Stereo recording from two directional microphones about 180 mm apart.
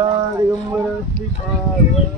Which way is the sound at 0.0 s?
25° right (ahead or behind).